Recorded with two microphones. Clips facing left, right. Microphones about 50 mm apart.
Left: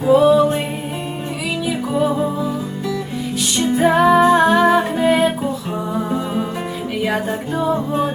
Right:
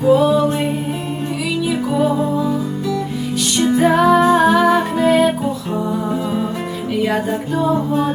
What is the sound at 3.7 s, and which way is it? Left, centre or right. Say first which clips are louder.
Music: even; centre.